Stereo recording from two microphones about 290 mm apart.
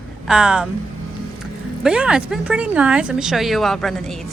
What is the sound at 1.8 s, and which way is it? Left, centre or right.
Speech, centre.